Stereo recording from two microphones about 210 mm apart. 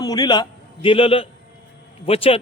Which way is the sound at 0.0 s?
20° left (ahead or behind).